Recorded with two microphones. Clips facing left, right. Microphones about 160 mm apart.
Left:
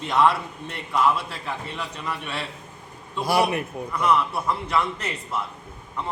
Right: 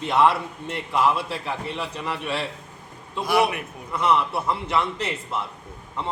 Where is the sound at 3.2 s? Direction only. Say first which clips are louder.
Even; 35° left (ahead or behind).